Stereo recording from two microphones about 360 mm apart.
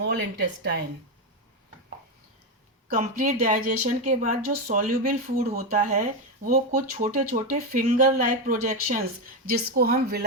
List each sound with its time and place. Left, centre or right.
0.0 s speech: right
2.9 s speech: right